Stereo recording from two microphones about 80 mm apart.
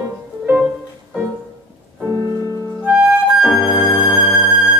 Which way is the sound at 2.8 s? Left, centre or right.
Centre.